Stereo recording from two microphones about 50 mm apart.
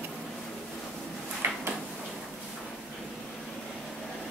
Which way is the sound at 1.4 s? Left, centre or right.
Right.